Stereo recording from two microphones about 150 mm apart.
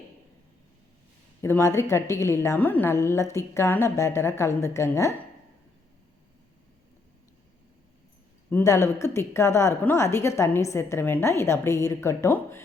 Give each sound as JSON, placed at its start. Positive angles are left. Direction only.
{"t": 1.4, "sound": "a woman's voice", "side_deg": 20}
{"t": 8.4, "sound": "a woman's voice", "side_deg": 15}